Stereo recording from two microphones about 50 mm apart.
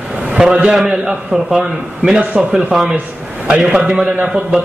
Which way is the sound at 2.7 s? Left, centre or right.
Centre.